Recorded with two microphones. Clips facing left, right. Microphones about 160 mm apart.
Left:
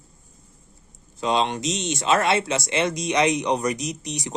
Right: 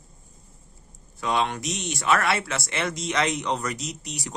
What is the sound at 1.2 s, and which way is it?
Speech, 20° left (ahead or behind).